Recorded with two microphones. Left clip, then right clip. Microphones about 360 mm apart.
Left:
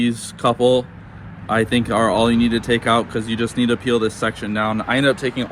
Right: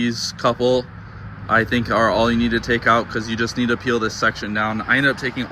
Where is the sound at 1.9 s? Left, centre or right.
Left.